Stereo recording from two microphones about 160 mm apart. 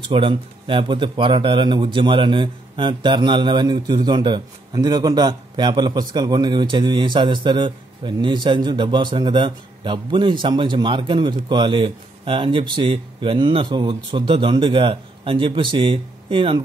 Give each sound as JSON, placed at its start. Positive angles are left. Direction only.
{"t": 0.0, "sound": "a man's voice", "side_deg": -30}